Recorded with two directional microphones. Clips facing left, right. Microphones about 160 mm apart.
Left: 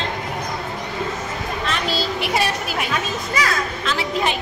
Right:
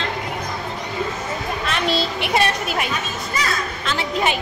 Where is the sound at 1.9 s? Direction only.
Centre (ahead or behind).